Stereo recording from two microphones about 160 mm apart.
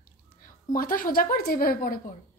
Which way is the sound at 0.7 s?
60° left (ahead or behind).